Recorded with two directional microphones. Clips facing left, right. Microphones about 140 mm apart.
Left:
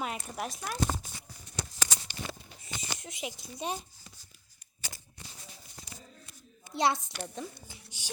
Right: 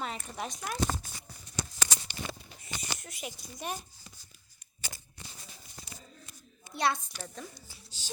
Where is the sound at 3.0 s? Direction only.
20° left (ahead or behind).